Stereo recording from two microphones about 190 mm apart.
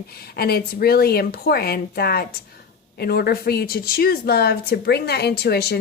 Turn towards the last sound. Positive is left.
turn(degrees=60)  # may be behind; listen again after turning